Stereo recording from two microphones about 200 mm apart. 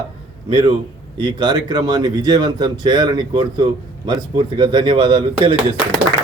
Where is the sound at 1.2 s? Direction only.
20° right (ahead or behind).